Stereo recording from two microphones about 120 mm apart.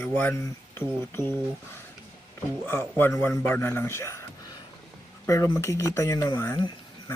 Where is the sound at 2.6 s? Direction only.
20° left (ahead or behind).